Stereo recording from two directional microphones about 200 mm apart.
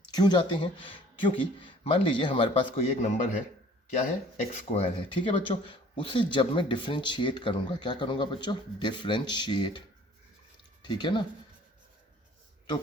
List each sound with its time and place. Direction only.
0.1 s speech: 20° left (ahead or behind)
4.4 s speech: 35° left (ahead or behind)
10.8 s speech: 25° left (ahead or behind)